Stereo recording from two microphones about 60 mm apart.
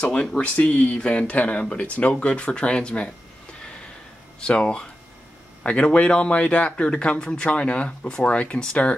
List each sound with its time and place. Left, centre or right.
0.0 s a man's voice: centre
4.4 s a man's voice: centre